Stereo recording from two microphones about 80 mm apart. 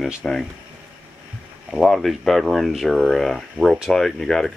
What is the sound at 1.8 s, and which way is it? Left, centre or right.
Speech, centre.